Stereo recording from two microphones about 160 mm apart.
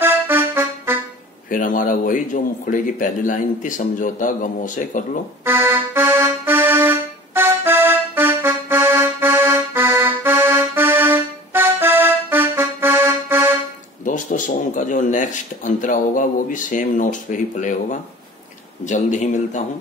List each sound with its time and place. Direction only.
0.0 s accordion: 15° right (ahead or behind)
1.5 s speech: 55° left (ahead or behind)
5.4 s accordion: 15° right (ahead or behind)
14.0 s speech: 50° left (ahead or behind)